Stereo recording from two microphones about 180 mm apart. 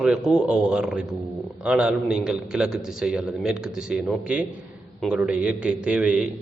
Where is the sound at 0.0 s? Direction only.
5° right (ahead or behind).